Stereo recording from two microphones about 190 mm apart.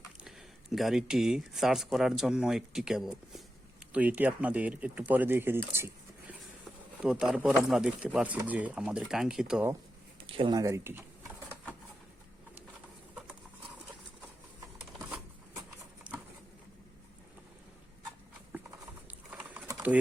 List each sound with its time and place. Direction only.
0.3 s speech: centre (ahead or behind)
7.0 s speech: 5° right (ahead or behind)
10.2 s speech: 30° right (ahead or behind)
11.3 s a sound: 10° left (ahead or behind)
16.1 s a sound: 5° right (ahead or behind)
19.0 s sewing machine: 5° right (ahead or behind)